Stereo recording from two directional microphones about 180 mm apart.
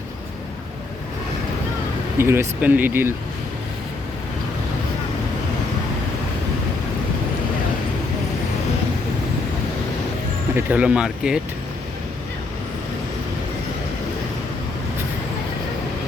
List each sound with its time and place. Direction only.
2.1 s speech: 15° right (ahead or behind)
10.5 s speech: 10° right (ahead or behind)